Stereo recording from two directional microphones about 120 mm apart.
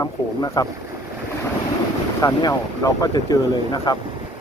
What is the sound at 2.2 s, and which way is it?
Speech, 30° left (ahead or behind).